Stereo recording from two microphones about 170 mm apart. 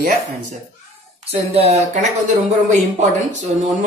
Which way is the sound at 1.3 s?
35° right (ahead or behind).